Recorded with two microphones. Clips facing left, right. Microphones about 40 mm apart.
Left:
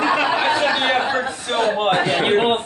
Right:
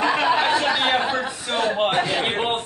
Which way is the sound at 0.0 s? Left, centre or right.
Centre.